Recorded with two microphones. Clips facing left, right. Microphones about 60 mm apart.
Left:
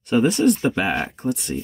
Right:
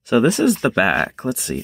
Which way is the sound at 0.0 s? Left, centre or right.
Right.